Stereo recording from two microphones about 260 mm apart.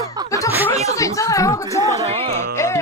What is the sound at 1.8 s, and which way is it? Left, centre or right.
Speech, right.